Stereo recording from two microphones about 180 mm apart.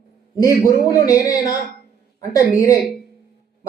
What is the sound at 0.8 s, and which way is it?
A man's voice, 20° left (ahead or behind).